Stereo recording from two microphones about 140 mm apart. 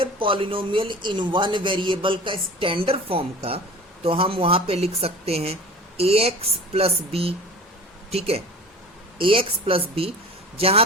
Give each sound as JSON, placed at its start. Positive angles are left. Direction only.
{"t": 0.0, "sound": "a woman's voice", "side_deg": -40}